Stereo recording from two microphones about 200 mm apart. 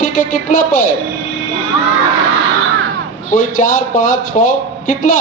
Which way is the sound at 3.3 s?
40° left (ahead or behind).